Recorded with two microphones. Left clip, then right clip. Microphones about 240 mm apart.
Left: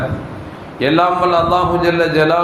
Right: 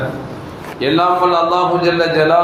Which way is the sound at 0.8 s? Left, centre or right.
Left.